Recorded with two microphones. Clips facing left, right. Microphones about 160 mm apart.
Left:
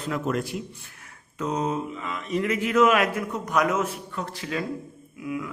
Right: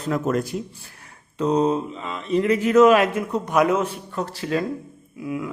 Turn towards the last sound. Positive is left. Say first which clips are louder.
# right 2 dB
turn(degrees=-30)  # may be behind; listen again after turning